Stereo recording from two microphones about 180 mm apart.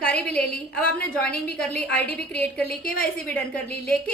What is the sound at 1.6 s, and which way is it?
A woman's voice, 5° left (ahead or behind).